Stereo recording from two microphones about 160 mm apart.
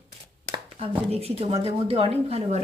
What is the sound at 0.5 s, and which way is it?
Speech, 40° right (ahead or behind).